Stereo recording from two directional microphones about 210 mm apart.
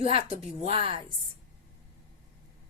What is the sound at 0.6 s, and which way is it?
Speech, 25° right (ahead or behind).